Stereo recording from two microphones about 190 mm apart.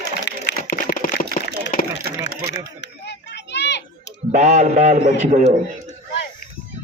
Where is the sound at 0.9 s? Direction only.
45° left (ahead or behind).